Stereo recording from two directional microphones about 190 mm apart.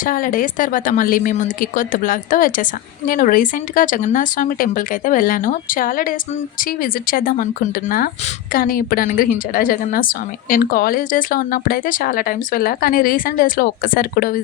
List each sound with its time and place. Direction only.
0.0 s a woman's voice: 45° left (ahead or behind)